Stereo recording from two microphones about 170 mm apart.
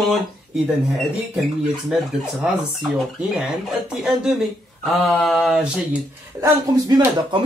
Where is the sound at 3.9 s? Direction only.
5° right (ahead or behind).